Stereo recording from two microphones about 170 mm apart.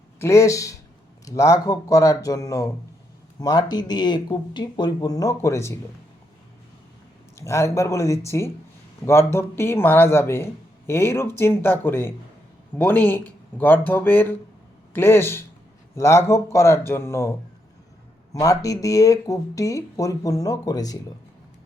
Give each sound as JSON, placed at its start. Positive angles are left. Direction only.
{"t": 0.2, "sound": "a man's voice", "side_deg": 15}
{"t": 7.3, "sound": "a man's voice", "side_deg": 15}
{"t": 18.3, "sound": "speech", "side_deg": 20}